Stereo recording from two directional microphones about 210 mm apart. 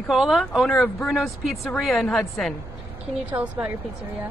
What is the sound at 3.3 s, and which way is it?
Speech, 5° right (ahead or behind).